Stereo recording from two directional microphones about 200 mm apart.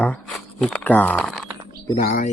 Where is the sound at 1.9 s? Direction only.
40° left (ahead or behind).